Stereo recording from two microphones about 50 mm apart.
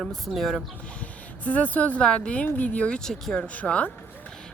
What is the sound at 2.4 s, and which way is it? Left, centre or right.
Speech, left.